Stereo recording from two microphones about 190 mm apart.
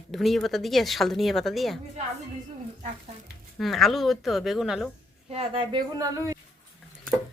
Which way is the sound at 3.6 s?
Centre (ahead or behind).